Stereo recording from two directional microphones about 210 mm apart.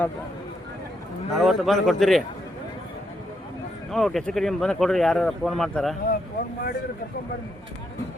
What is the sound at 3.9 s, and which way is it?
Speech, centre (ahead or behind).